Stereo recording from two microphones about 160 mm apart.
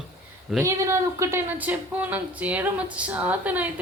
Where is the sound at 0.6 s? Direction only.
15° right (ahead or behind).